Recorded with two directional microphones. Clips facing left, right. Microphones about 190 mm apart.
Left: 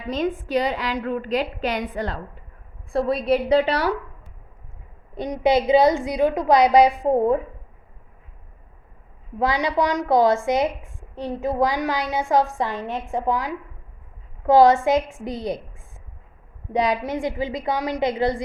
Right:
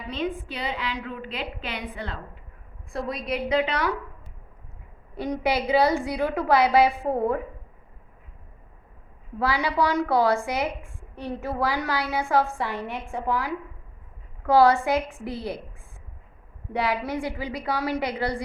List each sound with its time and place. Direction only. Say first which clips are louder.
0.4 s a woman's voice: left 8 dB; 40° left (ahead or behind)
5.1 s a woman's voice: left 6 dB; 20° left (ahead or behind)
9.4 s a woman's voice: left 3 dB; 20° left (ahead or behind)
16.7 s a woman's voice: left 4 dB; 20° left (ahead or behind)